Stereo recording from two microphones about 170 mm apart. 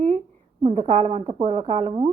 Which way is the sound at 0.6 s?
45° right (ahead or behind).